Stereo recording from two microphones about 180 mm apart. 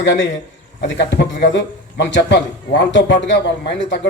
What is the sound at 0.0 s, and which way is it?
Speech, 90° left.